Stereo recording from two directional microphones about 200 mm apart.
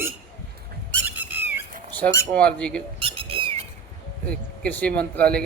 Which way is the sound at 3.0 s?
25° right (ahead or behind).